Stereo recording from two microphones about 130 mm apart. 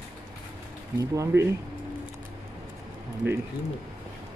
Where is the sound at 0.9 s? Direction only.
25° right (ahead or behind).